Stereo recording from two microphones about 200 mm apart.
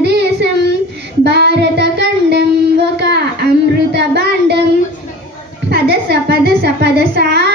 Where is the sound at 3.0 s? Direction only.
60° right (ahead or behind).